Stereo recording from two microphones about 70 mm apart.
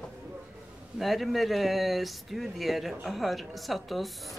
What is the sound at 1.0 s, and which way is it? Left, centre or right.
Speech, centre.